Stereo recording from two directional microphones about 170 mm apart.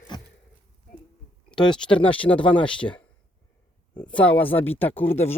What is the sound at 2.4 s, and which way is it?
Speech, 30° left (ahead or behind).